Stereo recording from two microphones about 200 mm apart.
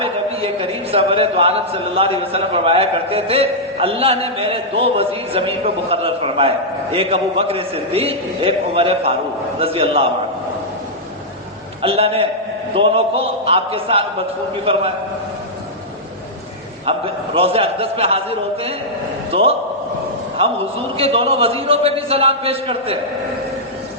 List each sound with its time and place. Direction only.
0.0 s a man's voice: 30° right (ahead or behind)
11.8 s a man's voice: 30° right (ahead or behind)
17.3 s a man's voice: 30° right (ahead or behind)
20.9 s a man's voice: 30° right (ahead or behind)